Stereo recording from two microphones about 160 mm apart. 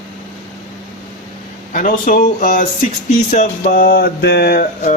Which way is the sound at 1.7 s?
55° left (ahead or behind).